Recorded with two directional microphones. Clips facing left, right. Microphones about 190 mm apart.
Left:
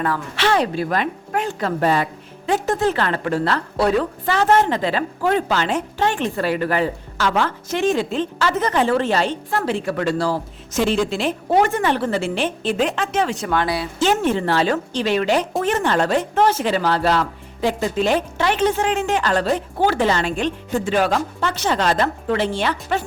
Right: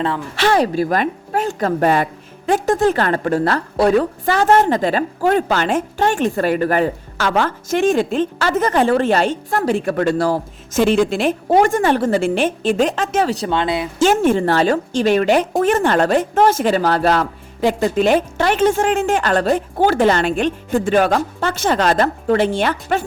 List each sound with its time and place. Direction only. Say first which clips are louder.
0.3 s a woman's voice: right 4 dB; 40° right (ahead or behind)
13.6 s speech: right 1 dB; 20° right (ahead or behind)
14.0 s a woman's voice: right 5 dB; 45° right (ahead or behind)